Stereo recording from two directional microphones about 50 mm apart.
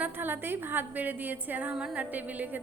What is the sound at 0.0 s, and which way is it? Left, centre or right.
A woman's voice, right.